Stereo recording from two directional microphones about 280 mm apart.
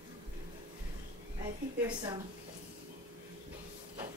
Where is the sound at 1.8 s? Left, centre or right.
Centre.